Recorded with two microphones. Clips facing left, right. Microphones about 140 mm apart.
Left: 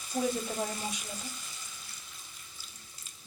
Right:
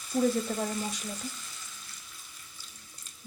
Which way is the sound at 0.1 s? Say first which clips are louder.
Right 4 dB; 15° left (ahead or behind).